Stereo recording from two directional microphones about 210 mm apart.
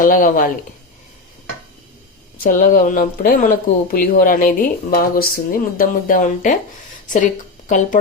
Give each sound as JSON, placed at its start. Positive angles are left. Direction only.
{"t": 0.0, "sound": "speech", "side_deg": 40}
{"t": 2.4, "sound": "speech", "side_deg": 40}
{"t": 7.7, "sound": "speech", "side_deg": 35}